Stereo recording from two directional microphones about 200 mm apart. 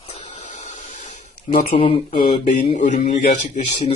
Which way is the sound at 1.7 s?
25° left (ahead or behind).